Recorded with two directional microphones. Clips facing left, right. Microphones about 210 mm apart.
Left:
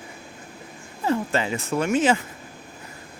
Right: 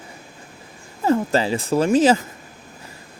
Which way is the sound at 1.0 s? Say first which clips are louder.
Right 5 dB; 40° right (ahead or behind).